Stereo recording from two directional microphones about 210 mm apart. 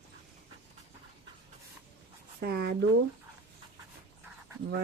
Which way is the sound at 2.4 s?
45° right (ahead or behind).